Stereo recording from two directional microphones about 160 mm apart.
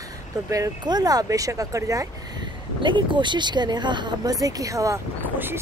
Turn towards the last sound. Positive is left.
turn(degrees=-15)  # may be behind; listen again after turning